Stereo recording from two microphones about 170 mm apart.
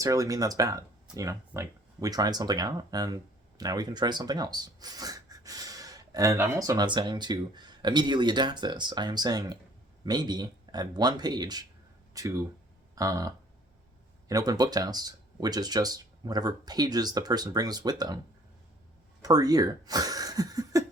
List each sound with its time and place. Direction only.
0.0 s speech: 20° right (ahead or behind)
19.2 s speech: 20° right (ahead or behind)